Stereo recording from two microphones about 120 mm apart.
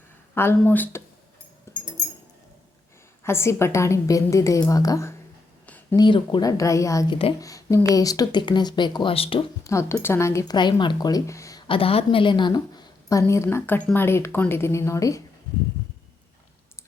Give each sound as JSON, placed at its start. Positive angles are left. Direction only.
{"t": 0.3, "sound": "speech", "side_deg": 15}
{"t": 1.7, "sound": "a sound", "side_deg": 20}
{"t": 3.2, "sound": "a woman's voice", "side_deg": 20}
{"t": 5.6, "sound": "a sound", "side_deg": 15}
{"t": 6.0, "sound": "a woman's voice", "side_deg": 40}
{"t": 6.4, "sound": "a woman's voice", "side_deg": 30}
{"t": 7.1, "sound": "speech", "side_deg": 50}
{"t": 7.3, "sound": "a woman's voice", "side_deg": 30}
{"t": 9.6, "sound": "a woman's voice", "side_deg": 25}
{"t": 10.6, "sound": "a woman's voice", "side_deg": 40}
{"t": 11.7, "sound": "a woman's voice", "side_deg": 50}